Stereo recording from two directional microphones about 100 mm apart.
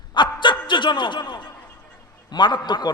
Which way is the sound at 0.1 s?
55° left (ahead or behind).